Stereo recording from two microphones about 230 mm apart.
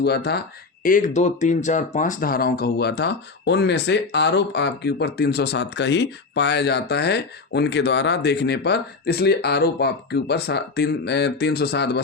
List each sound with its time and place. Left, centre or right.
0.0 s speech: left